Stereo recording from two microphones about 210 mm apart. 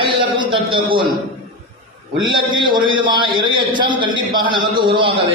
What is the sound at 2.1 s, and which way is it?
A man's voice, 20° right (ahead or behind).